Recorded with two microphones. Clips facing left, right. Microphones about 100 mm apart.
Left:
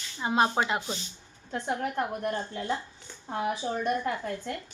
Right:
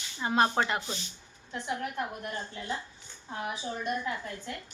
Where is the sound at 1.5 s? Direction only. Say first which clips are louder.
Left 4 dB; 45° left (ahead or behind).